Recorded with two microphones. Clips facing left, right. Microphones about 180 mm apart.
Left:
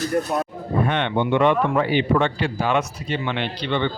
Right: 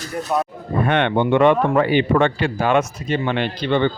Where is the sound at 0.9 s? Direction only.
60° right (ahead or behind).